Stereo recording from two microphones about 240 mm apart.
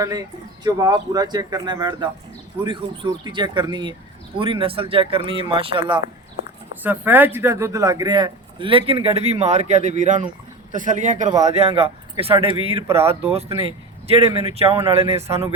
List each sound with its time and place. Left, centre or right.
0.0 s a man's voice: centre
12.9 s speech: centre
13.2 s a man's voice: right
14.8 s speech: centre